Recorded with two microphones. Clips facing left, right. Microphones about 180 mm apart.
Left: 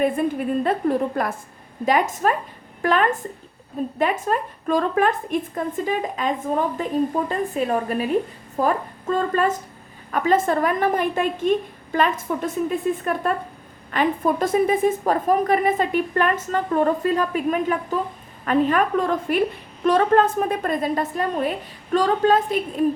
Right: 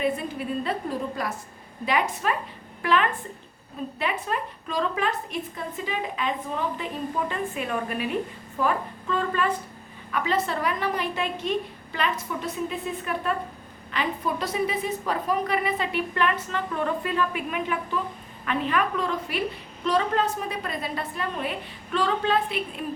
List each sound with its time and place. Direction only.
0.0 s a woman's voice: 50° left (ahead or behind)